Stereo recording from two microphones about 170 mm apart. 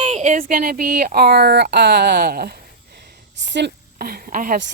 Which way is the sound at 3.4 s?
90° right.